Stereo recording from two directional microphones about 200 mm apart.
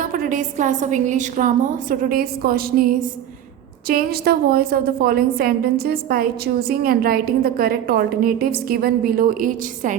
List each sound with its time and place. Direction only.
0.0 s a woman's voice: 40° right (ahead or behind)